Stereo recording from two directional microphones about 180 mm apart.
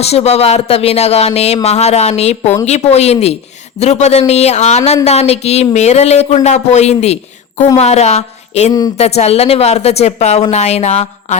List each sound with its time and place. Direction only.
0.0 s a woman's voice: 35° left (ahead or behind)